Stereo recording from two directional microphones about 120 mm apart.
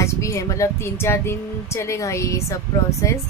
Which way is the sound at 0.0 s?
25° left (ahead or behind).